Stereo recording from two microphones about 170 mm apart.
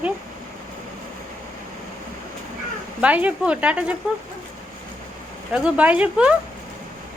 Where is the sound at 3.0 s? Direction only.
10° right (ahead or behind).